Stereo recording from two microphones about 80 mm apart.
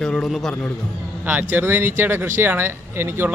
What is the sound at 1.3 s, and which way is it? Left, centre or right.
Speech, right.